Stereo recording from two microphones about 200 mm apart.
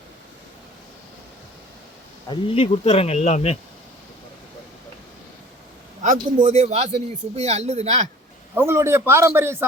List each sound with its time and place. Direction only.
2.3 s speech: 25° left (ahead or behind)
6.0 s a man's voice: 40° right (ahead or behind)
8.5 s a man's voice: 10° right (ahead or behind)